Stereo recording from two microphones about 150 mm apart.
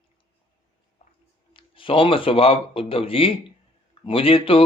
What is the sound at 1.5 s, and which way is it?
Speech, 35° left (ahead or behind).